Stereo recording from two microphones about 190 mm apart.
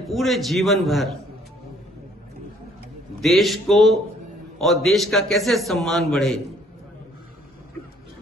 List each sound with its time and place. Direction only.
0.1 s a man's voice: centre (ahead or behind)
3.2 s a man's voice: centre (ahead or behind)